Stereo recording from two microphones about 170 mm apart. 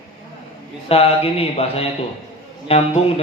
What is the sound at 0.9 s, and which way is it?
Speech, 35° left (ahead or behind).